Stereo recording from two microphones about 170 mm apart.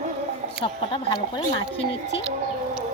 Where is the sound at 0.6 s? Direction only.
30° left (ahead or behind).